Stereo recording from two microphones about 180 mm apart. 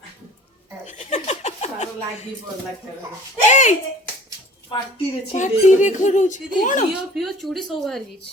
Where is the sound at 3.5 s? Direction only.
45° left (ahead or behind).